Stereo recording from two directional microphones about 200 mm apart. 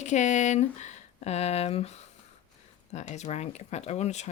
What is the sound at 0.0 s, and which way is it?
Speech, 35° left (ahead or behind).